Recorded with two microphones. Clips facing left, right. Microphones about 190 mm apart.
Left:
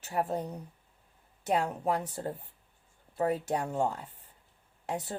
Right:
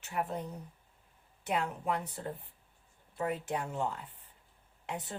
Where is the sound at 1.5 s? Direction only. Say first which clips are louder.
Left 4 dB; 40° left (ahead or behind).